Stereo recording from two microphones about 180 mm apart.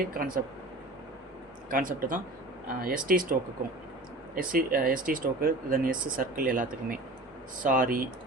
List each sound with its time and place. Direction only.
0.2 s speech: 50° right (ahead or behind)
1.7 s speech: 50° right (ahead or behind)
4.4 s speech: 50° right (ahead or behind)